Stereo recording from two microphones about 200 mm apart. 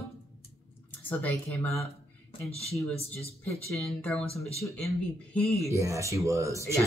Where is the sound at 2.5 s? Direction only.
30° left (ahead or behind).